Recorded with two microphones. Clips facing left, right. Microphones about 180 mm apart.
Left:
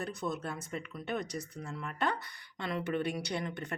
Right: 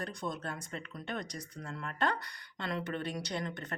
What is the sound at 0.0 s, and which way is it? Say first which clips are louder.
A woman's voice: left 2 dB; 5° left (ahead or behind).